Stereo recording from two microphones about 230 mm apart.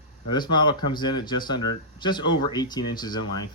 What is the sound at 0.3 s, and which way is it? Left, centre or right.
Speech, centre.